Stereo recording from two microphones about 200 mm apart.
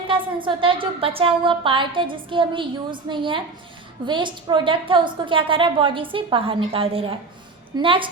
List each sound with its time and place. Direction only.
0.1 s a woman's voice: 25° right (ahead or behind)